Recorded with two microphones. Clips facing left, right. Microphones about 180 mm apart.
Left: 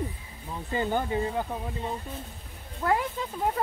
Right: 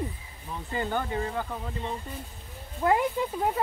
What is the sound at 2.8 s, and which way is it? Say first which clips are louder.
Speech: right 3 dB; 15° right (ahead or behind).